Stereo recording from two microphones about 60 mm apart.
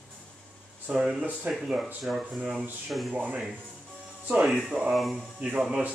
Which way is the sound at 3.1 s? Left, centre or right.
Right.